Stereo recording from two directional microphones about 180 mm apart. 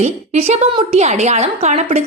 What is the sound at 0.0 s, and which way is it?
A woman's voice, 35° right (ahead or behind).